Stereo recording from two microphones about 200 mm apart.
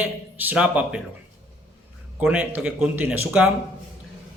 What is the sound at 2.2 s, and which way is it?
Speech, 5° right (ahead or behind).